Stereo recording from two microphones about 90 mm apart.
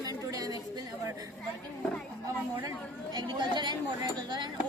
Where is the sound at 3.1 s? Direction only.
50° right (ahead or behind).